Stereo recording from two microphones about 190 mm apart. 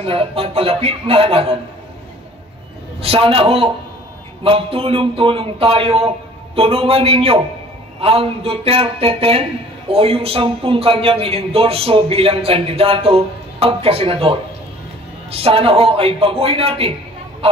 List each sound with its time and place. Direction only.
0.0 s speech: 30° right (ahead or behind)
3.0 s a man's voice: 30° right (ahead or behind)